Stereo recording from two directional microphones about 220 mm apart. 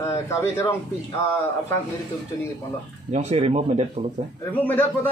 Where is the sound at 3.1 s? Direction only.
30° right (ahead or behind).